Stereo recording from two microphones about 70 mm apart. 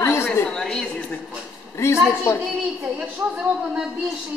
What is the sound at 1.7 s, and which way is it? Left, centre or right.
Speech, left.